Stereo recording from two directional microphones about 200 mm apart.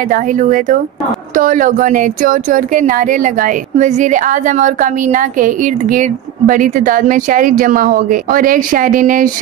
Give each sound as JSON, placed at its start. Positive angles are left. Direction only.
{"t": 0.1, "sound": "speech", "side_deg": -40}